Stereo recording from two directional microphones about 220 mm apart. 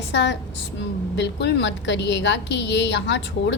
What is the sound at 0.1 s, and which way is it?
A woman's voice, 50° left (ahead or behind).